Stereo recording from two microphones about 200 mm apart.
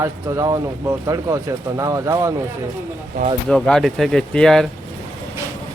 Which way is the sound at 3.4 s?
5° left (ahead or behind).